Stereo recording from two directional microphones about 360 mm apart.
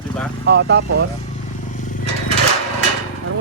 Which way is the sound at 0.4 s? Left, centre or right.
Right.